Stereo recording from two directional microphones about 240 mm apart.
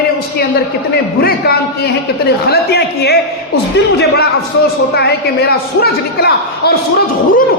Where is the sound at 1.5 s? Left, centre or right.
Left.